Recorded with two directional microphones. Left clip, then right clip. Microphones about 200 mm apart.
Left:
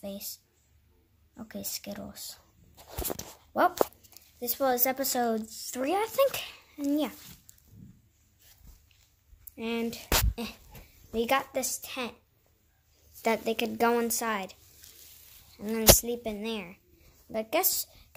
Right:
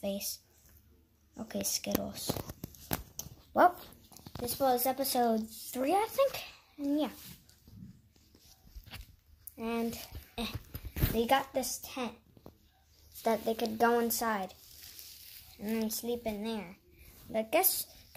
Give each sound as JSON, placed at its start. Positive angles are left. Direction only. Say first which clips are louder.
{"t": 0.0, "sound": "a sound", "louder": "right 4 dB", "side_deg": -10}
{"t": 1.3, "sound": "a woman's voice", "louder": "right 3 dB", "side_deg": -10}
{"t": 9.6, "sound": "speech", "louder": "left 3 dB", "side_deg": 20}
{"t": 11.1, "sound": "a woman's voice", "louder": "left 2 dB", "side_deg": 0}
{"t": 13.2, "sound": "speech", "louder": "left 3 dB", "side_deg": 20}
{"t": 15.6, "sound": "speech", "louder": "left 13 dB", "side_deg": 15}
{"t": 17.3, "sound": "a woman's voice", "louder": "left 1 dB", "side_deg": 0}